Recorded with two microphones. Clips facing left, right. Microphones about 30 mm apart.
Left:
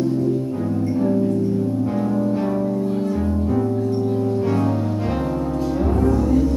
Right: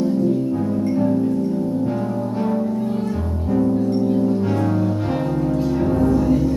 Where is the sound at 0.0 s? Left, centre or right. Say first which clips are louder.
Right 1 dB; centre.